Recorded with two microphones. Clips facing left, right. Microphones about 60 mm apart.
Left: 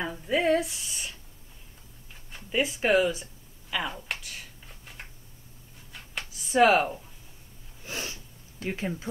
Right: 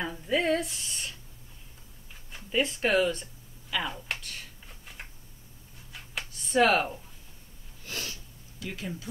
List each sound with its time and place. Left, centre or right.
0.0 s speech: centre
2.3 s speech: centre
3.7 s computer keyboard: centre
5.9 s a sound: centre
7.8 s sneeze: left
8.5 s speech: left